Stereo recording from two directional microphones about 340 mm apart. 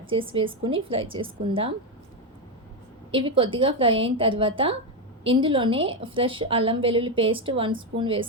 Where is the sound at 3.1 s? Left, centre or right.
Centre.